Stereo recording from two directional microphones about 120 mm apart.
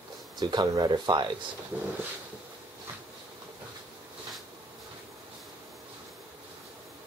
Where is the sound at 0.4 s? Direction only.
35° right (ahead or behind).